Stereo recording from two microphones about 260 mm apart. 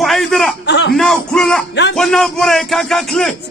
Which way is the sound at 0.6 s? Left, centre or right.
Left.